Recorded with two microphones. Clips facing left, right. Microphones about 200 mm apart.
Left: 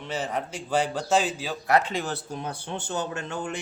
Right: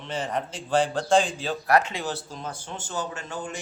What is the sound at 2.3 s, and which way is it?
Speech, 60° left (ahead or behind).